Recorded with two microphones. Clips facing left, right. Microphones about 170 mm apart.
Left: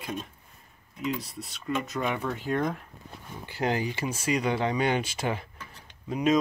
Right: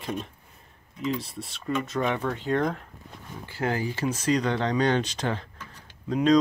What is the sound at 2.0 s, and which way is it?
Speech, 10° left (ahead or behind).